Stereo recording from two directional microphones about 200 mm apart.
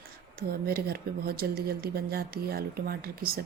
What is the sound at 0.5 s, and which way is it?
Speech, 50° right (ahead or behind).